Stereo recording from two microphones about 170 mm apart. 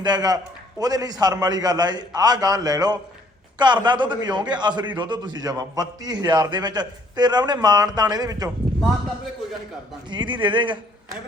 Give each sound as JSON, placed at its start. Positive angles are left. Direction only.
{"t": 0.0, "sound": "a man's voice", "side_deg": -25}
{"t": 10.1, "sound": "a man's voice", "side_deg": -25}